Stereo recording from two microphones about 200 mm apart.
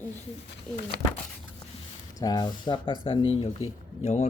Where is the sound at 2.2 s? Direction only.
20° left (ahead or behind).